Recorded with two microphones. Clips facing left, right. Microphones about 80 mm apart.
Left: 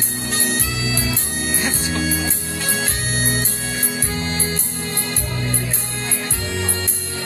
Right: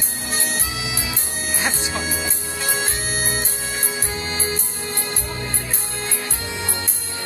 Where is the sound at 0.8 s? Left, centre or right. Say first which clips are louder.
Left 4 dB; right.